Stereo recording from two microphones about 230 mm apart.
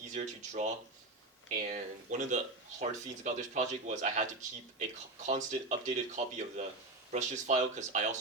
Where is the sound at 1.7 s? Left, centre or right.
Right.